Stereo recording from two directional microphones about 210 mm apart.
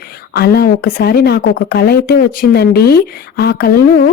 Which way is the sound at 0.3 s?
45° left (ahead or behind).